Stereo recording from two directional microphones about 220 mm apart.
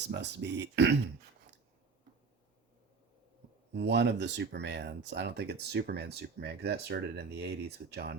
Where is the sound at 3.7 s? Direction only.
50° right (ahead or behind).